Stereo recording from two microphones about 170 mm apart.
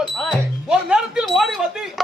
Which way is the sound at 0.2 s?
Centre (ahead or behind).